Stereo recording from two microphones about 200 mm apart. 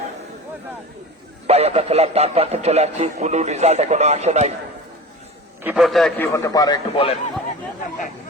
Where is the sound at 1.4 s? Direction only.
30° right (ahead or behind).